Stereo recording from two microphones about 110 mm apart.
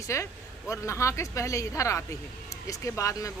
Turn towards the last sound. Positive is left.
turn(degrees=30)  # may be behind; listen again after turning